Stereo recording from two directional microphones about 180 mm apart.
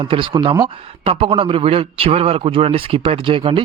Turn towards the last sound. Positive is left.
turn(degrees=-30)  # may be behind; listen again after turning